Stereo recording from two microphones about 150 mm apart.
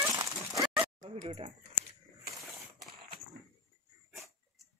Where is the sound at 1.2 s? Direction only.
40° right (ahead or behind).